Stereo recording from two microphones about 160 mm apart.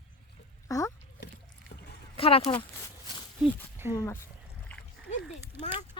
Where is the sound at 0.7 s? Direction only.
20° left (ahead or behind).